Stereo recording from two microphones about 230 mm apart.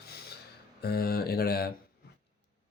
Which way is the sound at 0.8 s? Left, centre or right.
Left.